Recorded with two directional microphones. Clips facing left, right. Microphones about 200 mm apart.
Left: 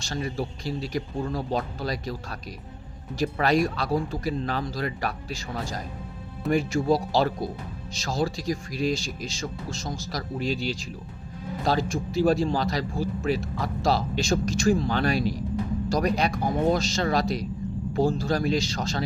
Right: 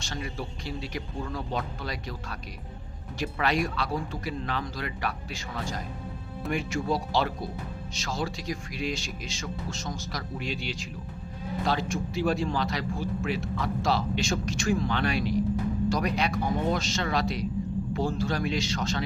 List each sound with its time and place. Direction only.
0.0 s speech: 40° left (ahead or behind)